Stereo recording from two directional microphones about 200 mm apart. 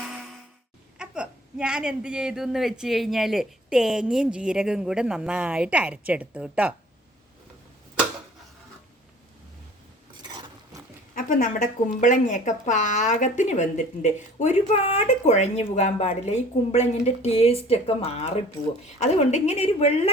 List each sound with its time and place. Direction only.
0.9 s a woman's voice: 5° right (ahead or behind)
10.2 s a sound: 15° right (ahead or behind)
11.1 s speech: 40° left (ahead or behind)